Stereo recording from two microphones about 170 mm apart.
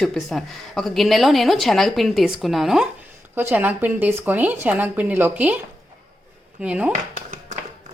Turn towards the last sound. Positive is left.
turn(degrees=-45)  # may be behind; listen again after turning